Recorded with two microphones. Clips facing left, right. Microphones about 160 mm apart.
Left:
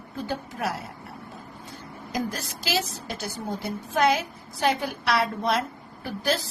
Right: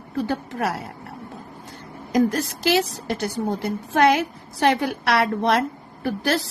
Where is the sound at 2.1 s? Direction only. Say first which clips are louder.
Right 10 dB; 60° right (ahead or behind).